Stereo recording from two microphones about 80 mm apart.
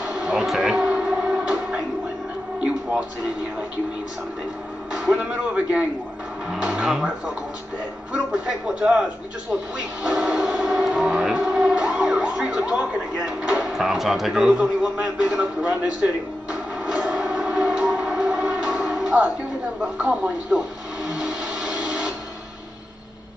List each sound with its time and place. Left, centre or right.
0.0 s a sound: centre
2.6 s music: centre
4.9 s a man's voice: centre
8.1 s a man's voice: centre
10.0 s speech: centre
16.8 s music: centre
20.0 s a sound: centre